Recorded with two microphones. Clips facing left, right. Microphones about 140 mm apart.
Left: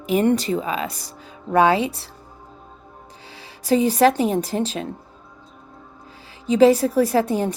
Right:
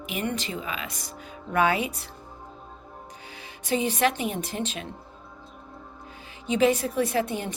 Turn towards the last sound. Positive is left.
turn(degrees=40)  # may be behind; listen again after turning